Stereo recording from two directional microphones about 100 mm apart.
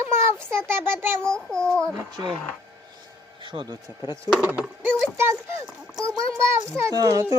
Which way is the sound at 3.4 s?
50° right (ahead or behind).